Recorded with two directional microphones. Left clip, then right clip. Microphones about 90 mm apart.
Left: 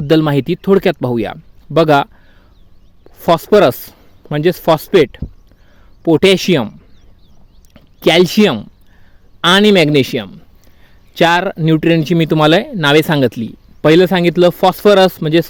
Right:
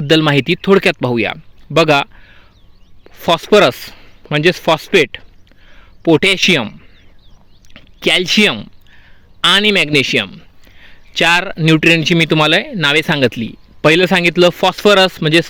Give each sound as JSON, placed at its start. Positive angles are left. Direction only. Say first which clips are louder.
{"t": 0.1, "sound": "speech", "louder": "right 1 dB", "side_deg": 40}
{"t": 3.1, "sound": "a sound", "louder": "left 2 dB", "side_deg": 45}
{"t": 3.5, "sound": "a man's voice", "louder": "right 2 dB", "side_deg": 35}
{"t": 11.9, "sound": "speech", "louder": "right 1 dB", "side_deg": 45}